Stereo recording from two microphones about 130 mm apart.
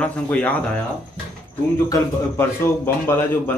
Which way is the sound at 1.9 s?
20° left (ahead or behind).